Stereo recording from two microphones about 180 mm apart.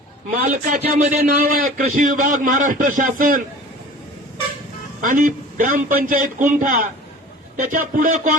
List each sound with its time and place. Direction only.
0.3 s a man's voice: 50° right (ahead or behind)
4.9 s a man's voice: 45° right (ahead or behind)